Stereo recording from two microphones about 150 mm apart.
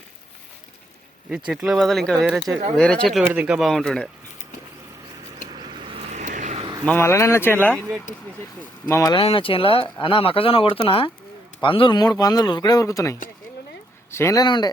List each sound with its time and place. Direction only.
1.5 s speech: 5° right (ahead or behind)
3.2 s speech: 10° right (ahead or behind)
5.9 s vehicle: 50° right (ahead or behind)
6.8 s speech: 15° left (ahead or behind)
8.9 s speech: 20° left (ahead or behind)
9.1 s speech: 35° left (ahead or behind)